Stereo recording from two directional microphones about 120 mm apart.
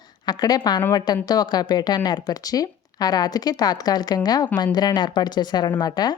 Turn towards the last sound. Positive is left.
turn(degrees=35)  # may be behind; listen again after turning